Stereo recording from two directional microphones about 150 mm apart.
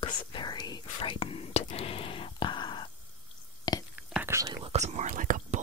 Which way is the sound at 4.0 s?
5° right (ahead or behind).